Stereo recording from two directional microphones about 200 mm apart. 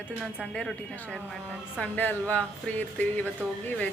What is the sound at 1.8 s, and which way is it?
Speech, 10° left (ahead or behind).